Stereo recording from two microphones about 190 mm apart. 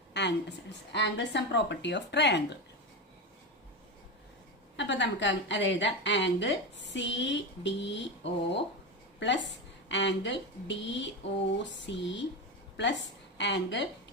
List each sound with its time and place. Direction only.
0.1 s a sound: 65° left (ahead or behind)
0.9 s a woman's voice: 65° left (ahead or behind)
4.8 s a woman's voice: 70° left (ahead or behind)